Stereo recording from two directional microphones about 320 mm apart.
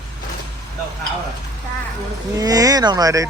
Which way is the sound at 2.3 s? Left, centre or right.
Centre.